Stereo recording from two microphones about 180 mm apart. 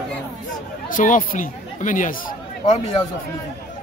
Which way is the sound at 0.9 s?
50° left (ahead or behind).